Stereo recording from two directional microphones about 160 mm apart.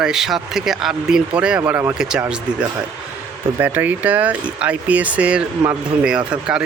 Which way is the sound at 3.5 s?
10° right (ahead or behind).